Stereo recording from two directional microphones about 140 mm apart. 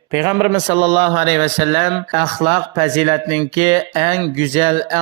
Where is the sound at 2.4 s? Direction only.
45° right (ahead or behind).